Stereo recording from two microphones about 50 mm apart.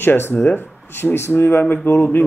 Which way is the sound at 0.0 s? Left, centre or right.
Left.